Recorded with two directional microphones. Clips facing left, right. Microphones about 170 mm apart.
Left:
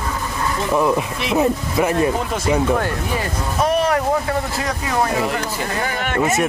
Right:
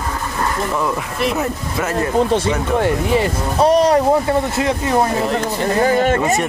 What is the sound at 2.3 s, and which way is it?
Speech, 25° right (ahead or behind).